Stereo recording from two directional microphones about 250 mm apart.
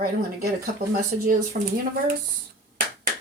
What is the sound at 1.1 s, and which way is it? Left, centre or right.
Speech, right.